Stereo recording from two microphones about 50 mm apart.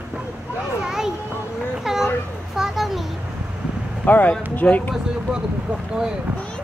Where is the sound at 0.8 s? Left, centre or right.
Centre.